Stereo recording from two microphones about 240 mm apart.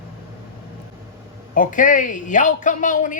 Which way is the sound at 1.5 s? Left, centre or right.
Left.